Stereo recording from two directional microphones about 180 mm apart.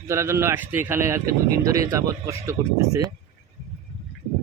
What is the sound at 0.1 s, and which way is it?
Speech, 15° right (ahead or behind).